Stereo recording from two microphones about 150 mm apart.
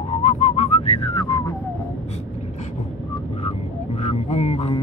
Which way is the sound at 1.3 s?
25° left (ahead or behind).